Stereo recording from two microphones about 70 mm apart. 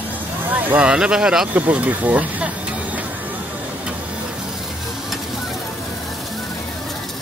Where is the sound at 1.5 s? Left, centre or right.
Right.